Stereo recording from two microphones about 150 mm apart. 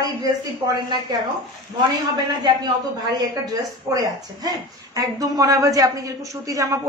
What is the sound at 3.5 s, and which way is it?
A woman's voice, 25° right (ahead or behind).